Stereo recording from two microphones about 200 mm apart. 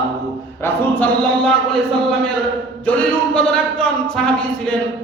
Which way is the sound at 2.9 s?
5° left (ahead or behind).